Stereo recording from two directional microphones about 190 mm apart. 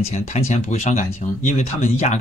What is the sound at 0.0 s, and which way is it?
Speech, 35° left (ahead or behind).